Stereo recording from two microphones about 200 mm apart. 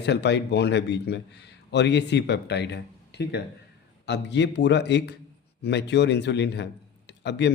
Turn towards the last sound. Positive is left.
turn(degrees=60)  # may be behind; listen again after turning